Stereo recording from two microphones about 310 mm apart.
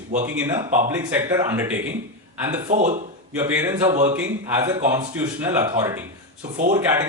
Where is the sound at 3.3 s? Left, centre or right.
Centre.